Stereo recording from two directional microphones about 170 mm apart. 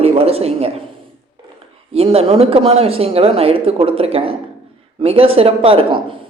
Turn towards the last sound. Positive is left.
turn(degrees=-30)  # may be behind; listen again after turning